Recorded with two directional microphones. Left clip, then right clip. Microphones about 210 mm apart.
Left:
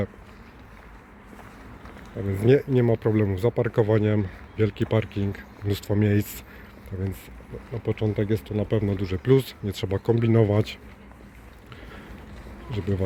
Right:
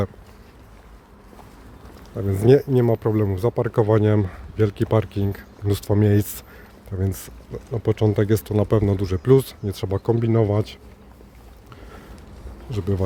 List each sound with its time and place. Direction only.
2.3 s speech: 20° right (ahead or behind); by 10.8 s 5° right (ahead or behind)
12.7 s speech: 15° right (ahead or behind)